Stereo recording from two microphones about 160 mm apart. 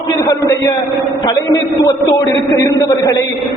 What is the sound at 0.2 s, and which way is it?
A man's voice, 20° left (ahead or behind).